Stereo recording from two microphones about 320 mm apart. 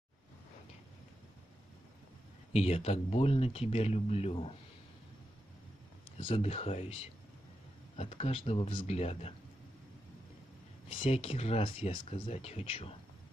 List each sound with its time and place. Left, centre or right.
2.5 s speech: centre
6.0 s speech: centre
10.9 s speech: centre